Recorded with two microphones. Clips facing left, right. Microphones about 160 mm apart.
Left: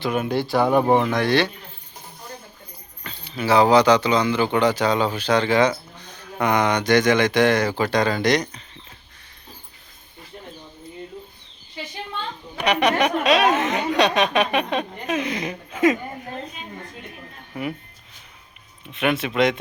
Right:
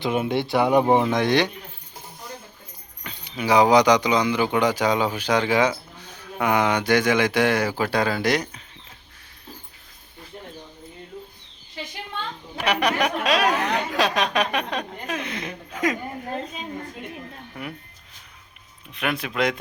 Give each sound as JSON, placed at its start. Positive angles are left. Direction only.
{"t": 0.0, "sound": "speech", "side_deg": -25}
{"t": 3.0, "sound": "speech", "side_deg": -15}
{"t": 12.5, "sound": "speech", "side_deg": 0}
{"t": 17.5, "sound": "speech", "side_deg": 5}
{"t": 18.9, "sound": "speech", "side_deg": 0}